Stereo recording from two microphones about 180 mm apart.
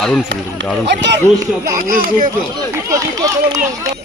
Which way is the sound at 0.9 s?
70° right (ahead or behind).